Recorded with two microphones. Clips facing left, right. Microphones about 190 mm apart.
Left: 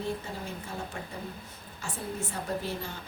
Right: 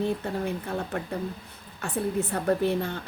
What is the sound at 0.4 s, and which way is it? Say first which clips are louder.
Speech: right 8 dB; 60° right (ahead or behind).